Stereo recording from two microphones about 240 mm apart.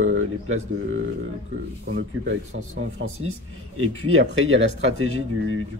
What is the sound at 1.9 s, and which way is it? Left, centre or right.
Speech, right.